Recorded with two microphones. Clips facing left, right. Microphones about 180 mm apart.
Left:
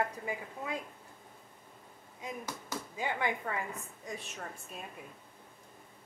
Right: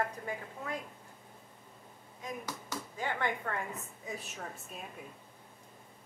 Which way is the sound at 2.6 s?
10° left (ahead or behind).